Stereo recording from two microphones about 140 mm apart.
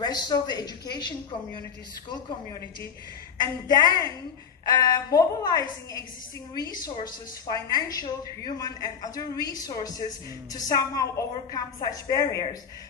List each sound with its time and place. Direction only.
0.0 s a woman's voice: 30° left (ahead or behind)
3.6 s a woman's voice: 25° left (ahead or behind)